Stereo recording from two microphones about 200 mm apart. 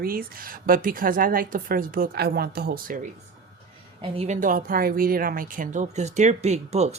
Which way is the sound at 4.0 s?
35° right (ahead or behind).